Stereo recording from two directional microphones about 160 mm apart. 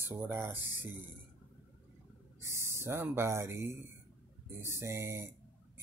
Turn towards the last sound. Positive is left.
turn(degrees=-15)  # may be behind; listen again after turning